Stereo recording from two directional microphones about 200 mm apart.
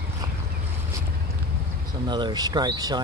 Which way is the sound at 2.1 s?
20° right (ahead or behind).